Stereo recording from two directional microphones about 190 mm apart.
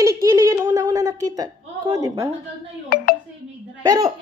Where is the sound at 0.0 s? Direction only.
15° right (ahead or behind).